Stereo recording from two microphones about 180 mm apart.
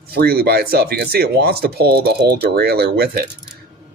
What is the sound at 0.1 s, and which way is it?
Speech, 60° right (ahead or behind).